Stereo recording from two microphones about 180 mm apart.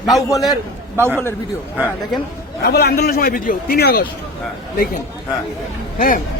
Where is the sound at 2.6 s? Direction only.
65° left (ahead or behind).